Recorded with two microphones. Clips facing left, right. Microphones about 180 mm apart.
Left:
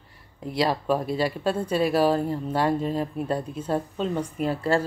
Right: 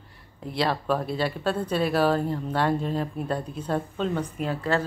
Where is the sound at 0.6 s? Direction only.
10° left (ahead or behind).